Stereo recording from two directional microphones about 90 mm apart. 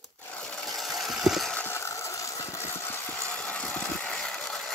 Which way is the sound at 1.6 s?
25° left (ahead or behind).